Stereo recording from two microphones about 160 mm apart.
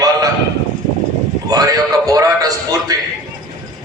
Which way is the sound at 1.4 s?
20° right (ahead or behind).